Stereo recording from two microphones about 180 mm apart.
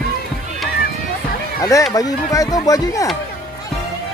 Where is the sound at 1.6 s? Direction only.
15° left (ahead or behind).